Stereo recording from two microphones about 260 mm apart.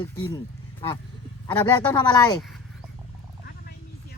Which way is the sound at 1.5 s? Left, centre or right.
Centre.